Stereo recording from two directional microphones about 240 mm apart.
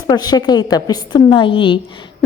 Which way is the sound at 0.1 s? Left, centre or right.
Centre.